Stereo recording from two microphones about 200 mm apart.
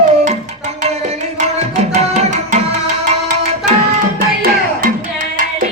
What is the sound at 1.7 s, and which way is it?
Tabla, 35° right (ahead or behind).